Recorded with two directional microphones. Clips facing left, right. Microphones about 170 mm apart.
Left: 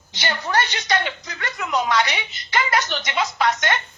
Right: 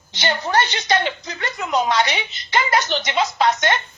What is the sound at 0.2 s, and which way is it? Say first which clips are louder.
A woman's voice: right 3 dB; 30° right (ahead or behind).